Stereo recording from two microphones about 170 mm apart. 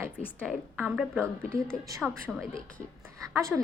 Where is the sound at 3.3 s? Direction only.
15° right (ahead or behind).